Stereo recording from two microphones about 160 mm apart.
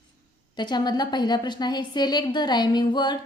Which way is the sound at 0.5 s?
25° left (ahead or behind).